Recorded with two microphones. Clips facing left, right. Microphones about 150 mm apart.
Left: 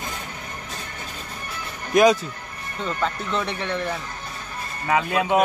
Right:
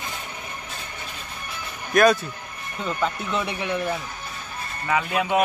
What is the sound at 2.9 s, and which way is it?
Speech, 5° right (ahead or behind).